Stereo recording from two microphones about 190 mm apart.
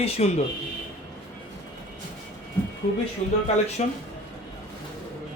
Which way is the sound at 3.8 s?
35° left (ahead or behind).